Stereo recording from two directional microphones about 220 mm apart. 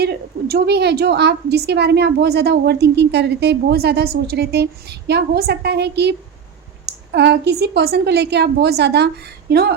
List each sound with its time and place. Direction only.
0.0 s a woman's voice: 45° right (ahead or behind)